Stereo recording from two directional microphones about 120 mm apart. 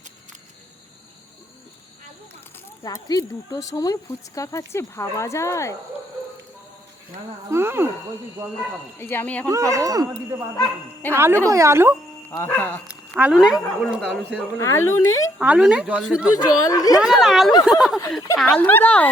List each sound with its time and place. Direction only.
2.8 s speech: 30° left (ahead or behind)
7.5 s speech: 20° right (ahead or behind)
9.0 s speech: 20° left (ahead or behind)
9.5 s speech: 25° right (ahead or behind)
12.4 s speech: 20° left (ahead or behind)
12.9 s speech: 10° right (ahead or behind)
14.6 s speech: 25° left (ahead or behind)
15.4 s speech: 10° right (ahead or behind)
16.4 s speech: 30° left (ahead or behind)
17.0 s speech: centre (ahead or behind)
18.4 s speech: 15° left (ahead or behind)